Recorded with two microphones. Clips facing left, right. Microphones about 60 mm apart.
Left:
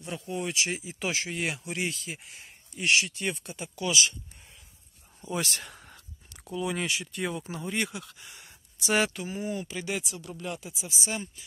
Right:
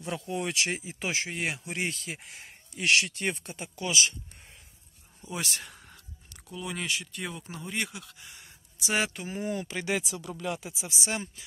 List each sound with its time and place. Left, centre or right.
0.3 s speech: right
0.7 s speech: right
0.9 s speech: right
2.0 s speech: right
2.8 s speech: right
3.3 s speech: right
5.3 s speech: centre
5.7 s a sound: centre
6.5 s speech: centre
8.8 s speech: centre
9.1 s speech: right
9.6 s speech: right